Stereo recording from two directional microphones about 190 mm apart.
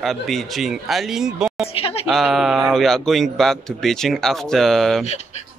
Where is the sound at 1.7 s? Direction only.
30° left (ahead or behind).